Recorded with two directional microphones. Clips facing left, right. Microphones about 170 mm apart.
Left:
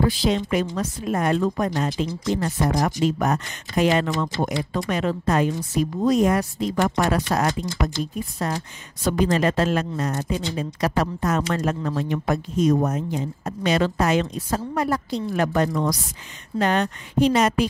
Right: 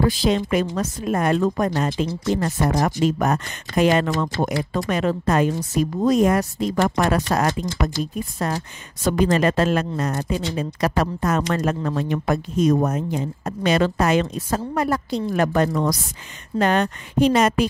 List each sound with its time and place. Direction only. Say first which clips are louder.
0.0 s speech: right 2 dB; 55° right (ahead or behind)